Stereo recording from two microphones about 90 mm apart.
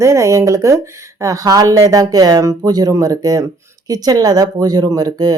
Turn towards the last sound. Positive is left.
turn(degrees=-45)  # may be behind; listen again after turning